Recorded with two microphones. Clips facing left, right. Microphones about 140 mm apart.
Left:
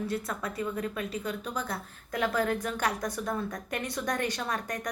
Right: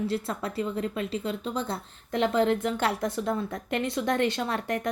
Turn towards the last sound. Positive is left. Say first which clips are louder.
# right 5 dB
turn(degrees=-25)  # may be behind; listen again after turning